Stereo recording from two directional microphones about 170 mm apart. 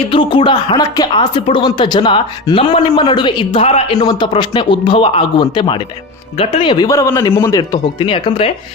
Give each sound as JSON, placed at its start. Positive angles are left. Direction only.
{"t": 0.1, "sound": "speech", "side_deg": 30}
{"t": 3.9, "sound": "a man's voice", "side_deg": 25}
{"t": 7.9, "sound": "speech", "side_deg": 30}